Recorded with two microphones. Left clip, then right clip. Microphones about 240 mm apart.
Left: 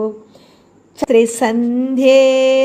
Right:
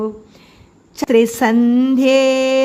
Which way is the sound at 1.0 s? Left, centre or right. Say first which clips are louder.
Left 1 dB; right.